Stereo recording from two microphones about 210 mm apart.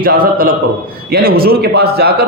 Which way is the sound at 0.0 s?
45° right (ahead or behind).